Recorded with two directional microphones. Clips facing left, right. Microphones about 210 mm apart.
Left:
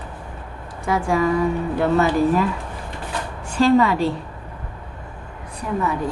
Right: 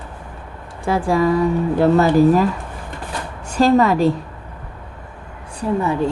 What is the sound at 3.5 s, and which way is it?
Speech, 40° right (ahead or behind).